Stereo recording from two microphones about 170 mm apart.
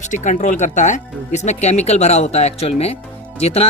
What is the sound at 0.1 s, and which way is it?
Speech, 45° left (ahead or behind).